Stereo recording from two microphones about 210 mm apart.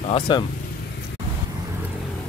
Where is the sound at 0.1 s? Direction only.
20° left (ahead or behind).